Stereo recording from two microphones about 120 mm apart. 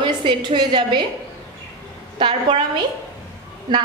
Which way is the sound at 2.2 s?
45° right (ahead or behind).